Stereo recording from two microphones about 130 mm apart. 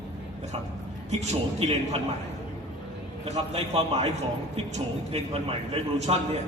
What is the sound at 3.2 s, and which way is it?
Speech, 55° right (ahead or behind).